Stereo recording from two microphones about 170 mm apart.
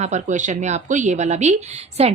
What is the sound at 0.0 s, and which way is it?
Speech, 45° right (ahead or behind).